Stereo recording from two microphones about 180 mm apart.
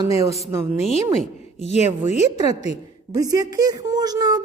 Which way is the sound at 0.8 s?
35° left (ahead or behind).